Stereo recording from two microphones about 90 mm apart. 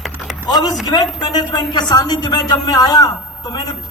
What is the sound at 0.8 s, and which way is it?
A man's voice, 50° left (ahead or behind).